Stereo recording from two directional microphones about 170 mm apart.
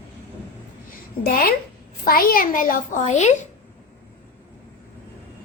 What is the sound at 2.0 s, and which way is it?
A woman's voice, 60° left (ahead or behind).